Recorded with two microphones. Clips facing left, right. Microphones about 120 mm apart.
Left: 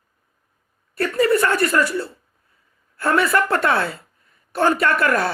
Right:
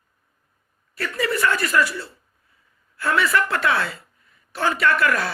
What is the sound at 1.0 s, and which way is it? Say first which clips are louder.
A woman's voice: left 6 dB; 45° left (ahead or behind).